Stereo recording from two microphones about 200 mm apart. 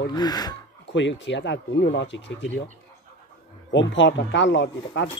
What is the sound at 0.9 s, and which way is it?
Speech, 65° left (ahead or behind).